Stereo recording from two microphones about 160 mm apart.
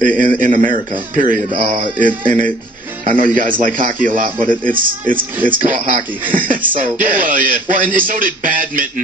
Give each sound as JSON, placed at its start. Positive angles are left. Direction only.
{"t": 0.0, "sound": "speech", "side_deg": -60}